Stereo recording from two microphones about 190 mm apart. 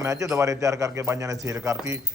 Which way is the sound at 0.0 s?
15° right (ahead or behind).